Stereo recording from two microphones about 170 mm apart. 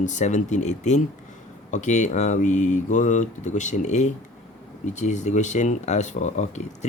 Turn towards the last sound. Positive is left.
turn(degrees=40)  # may be behind; listen again after turning